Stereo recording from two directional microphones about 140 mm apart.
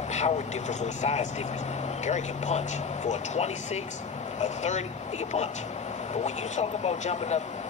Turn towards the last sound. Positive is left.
turn(degrees=55)  # may be behind; listen again after turning